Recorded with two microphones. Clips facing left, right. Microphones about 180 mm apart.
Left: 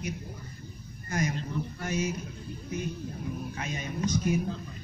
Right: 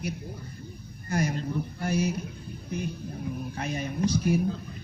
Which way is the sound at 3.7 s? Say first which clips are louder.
Right 4 dB; 30° right (ahead or behind).